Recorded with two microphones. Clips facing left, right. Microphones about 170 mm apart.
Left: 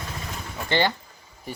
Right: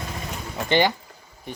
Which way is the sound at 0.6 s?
15° right (ahead or behind).